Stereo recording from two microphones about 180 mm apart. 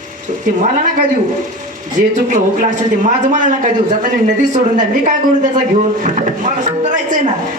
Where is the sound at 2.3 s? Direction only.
45° right (ahead or behind).